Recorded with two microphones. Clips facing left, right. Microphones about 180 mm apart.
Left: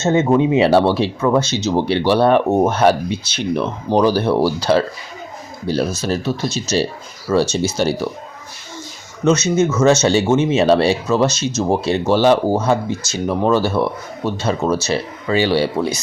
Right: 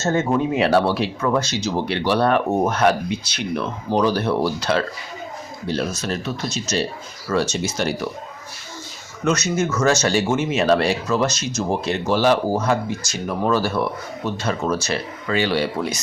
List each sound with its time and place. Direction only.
0.0 s speech: 20° left (ahead or behind)
9.2 s speech: 25° left (ahead or behind)